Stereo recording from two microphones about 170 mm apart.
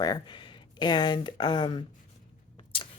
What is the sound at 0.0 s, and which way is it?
Speech, 25° left (ahead or behind).